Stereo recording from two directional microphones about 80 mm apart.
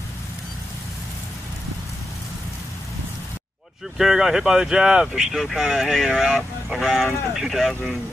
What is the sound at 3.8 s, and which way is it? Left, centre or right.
Speech, centre.